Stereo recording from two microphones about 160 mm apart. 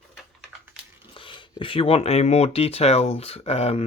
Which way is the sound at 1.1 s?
30° left (ahead or behind).